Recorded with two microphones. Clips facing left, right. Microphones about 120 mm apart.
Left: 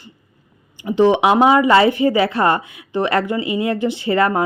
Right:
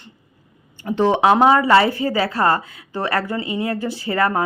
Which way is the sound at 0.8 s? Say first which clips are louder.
Left 3 dB; 15° left (ahead or behind).